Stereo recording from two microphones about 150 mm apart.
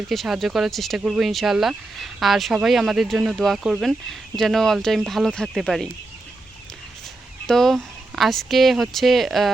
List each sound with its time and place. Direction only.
0.1 s speech: centre (ahead or behind)
7.4 s speech: centre (ahead or behind)